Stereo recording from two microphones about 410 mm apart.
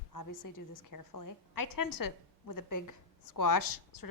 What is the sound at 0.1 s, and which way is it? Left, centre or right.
A woman's voice, left.